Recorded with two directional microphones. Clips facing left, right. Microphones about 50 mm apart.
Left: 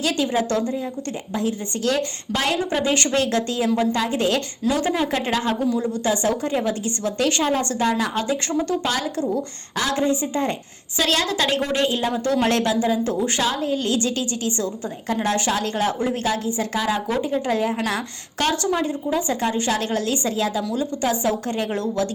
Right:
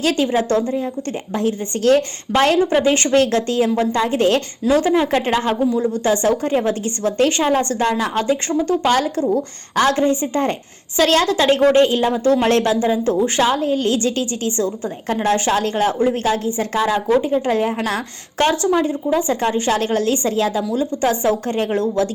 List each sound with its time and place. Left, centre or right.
0.0 s a woman's voice: right
1.3 s a woman's voice: right
2.6 s a woman's voice: right
5.6 s a woman's voice: centre
6.1 s a woman's voice: right
19.4 s a woman's voice: right